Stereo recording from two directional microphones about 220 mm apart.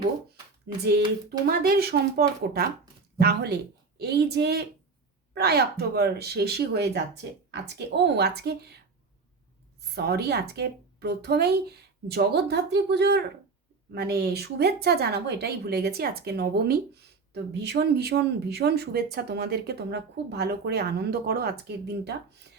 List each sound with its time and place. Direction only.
1.5 s speech: 45° right (ahead or behind)
9.9 s speech: 45° right (ahead or behind)